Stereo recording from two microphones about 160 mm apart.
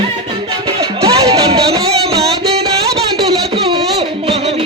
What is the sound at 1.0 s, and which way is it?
Music, 40° right (ahead or behind).